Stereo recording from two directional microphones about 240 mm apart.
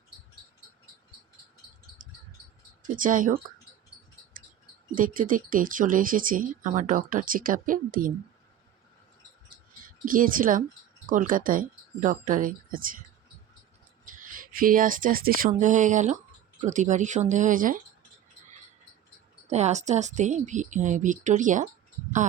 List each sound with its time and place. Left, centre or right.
2.0 s cricket: right
2.8 s speech: right
4.9 s speech: right
10.1 s speech: right
14.2 s speech: right
19.5 s speech: right